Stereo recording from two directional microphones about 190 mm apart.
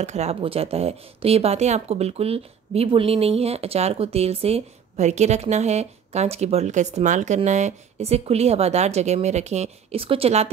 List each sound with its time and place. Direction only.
0.0 s speech: 35° right (ahead or behind)